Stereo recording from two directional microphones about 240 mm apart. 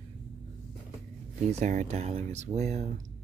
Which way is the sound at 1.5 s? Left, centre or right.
Right.